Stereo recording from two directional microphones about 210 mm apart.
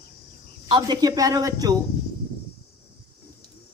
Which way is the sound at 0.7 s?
20° right (ahead or behind).